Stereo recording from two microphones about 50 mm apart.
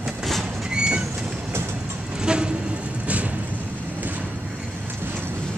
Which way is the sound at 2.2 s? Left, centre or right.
Centre.